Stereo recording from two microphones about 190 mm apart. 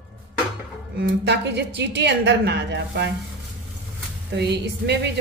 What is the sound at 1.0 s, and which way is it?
A woman's voice, 60° right (ahead or behind).